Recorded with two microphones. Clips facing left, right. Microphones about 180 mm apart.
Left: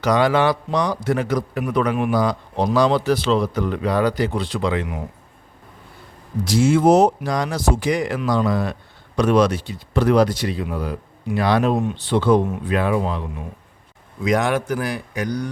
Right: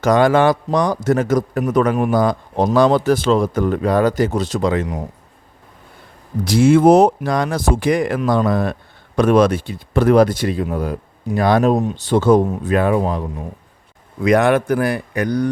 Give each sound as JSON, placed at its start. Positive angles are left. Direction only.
{"t": 0.0, "sound": "speech", "side_deg": -45}
{"t": 6.4, "sound": "speech", "side_deg": -60}
{"t": 14.2, "sound": "speech", "side_deg": -60}